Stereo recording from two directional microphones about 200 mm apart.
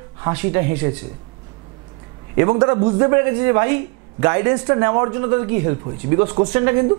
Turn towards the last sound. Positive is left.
turn(degrees=-20)  # may be behind; listen again after turning